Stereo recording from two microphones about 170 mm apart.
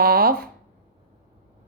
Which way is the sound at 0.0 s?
60° right (ahead or behind).